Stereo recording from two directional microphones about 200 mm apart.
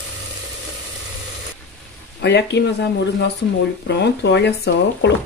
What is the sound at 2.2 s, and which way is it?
Speech, 60° left (ahead or behind).